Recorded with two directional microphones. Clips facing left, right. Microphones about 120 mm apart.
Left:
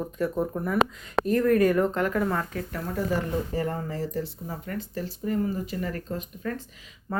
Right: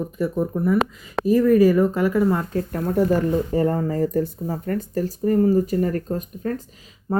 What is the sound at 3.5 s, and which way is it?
Speech, 35° right (ahead or behind).